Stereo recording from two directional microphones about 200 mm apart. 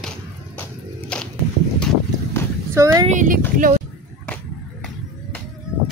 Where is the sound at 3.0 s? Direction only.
40° right (ahead or behind).